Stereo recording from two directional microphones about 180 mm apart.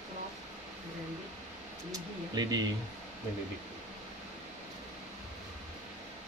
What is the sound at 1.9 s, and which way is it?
Speech, 20° right (ahead or behind).